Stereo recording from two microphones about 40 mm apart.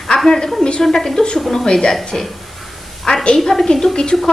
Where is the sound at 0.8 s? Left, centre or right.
Centre.